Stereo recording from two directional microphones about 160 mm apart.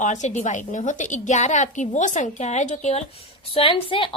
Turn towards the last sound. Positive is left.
turn(degrees=35)  # may be behind; listen again after turning